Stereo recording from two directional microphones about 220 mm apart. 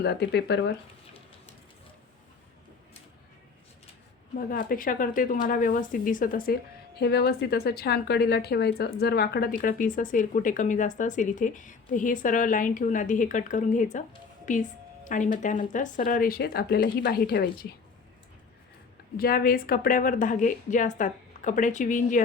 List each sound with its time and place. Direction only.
0.0 s speech: 50° left (ahead or behind)
4.4 s a woman's voice: 40° left (ahead or behind)
19.1 s a woman's voice: 40° left (ahead or behind)